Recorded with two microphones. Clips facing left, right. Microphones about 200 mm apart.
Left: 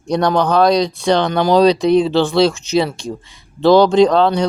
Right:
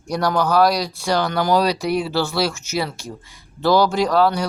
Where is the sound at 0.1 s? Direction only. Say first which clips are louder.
Left 4 dB; 25° left (ahead or behind).